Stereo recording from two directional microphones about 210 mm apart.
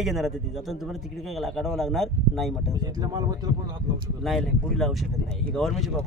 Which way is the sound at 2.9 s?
20° right (ahead or behind).